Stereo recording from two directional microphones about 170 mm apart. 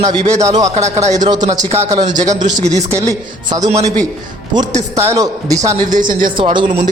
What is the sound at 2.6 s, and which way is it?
Speech, 40° right (ahead or behind).